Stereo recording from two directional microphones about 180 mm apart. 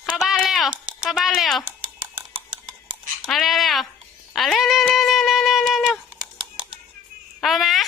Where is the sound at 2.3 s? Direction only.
30° right (ahead or behind).